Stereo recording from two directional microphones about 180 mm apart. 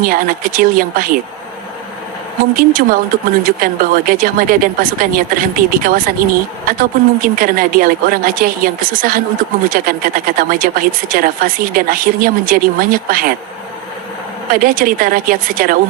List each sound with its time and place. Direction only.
0.0 s speech: 50° right (ahead or behind)
2.4 s speech: 55° right (ahead or behind)
14.5 s speech: 50° right (ahead or behind)